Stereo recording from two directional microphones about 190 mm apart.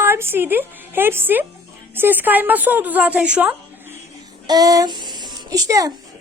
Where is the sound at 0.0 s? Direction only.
10° right (ahead or behind).